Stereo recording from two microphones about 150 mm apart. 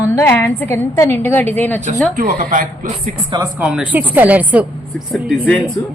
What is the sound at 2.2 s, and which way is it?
Speech, 55° right (ahead or behind).